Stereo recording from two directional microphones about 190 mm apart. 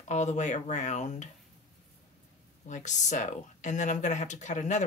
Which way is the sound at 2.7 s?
40° left (ahead or behind).